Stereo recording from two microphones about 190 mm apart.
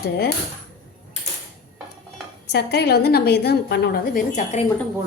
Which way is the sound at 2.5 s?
60° left (ahead or behind).